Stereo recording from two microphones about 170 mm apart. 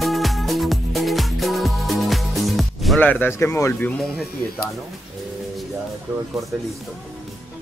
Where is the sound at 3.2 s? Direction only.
15° left (ahead or behind).